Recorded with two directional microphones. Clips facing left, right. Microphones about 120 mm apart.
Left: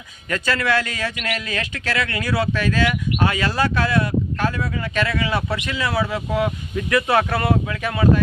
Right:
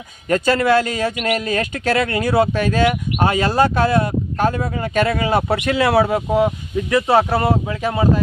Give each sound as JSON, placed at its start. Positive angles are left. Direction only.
{"t": 0.3, "sound": "a man's voice", "side_deg": -40}
{"t": 6.9, "sound": "speech", "side_deg": -30}